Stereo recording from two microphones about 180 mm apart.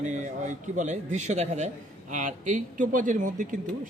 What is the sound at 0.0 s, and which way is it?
A man's voice, 40° right (ahead or behind).